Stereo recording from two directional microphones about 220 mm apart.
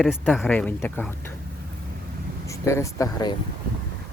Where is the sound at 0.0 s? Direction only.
Centre (ahead or behind).